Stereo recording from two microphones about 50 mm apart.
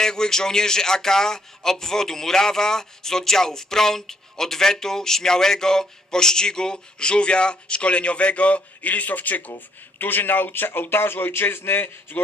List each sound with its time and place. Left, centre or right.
0.0 s a man's voice: centre; by 12.2 s left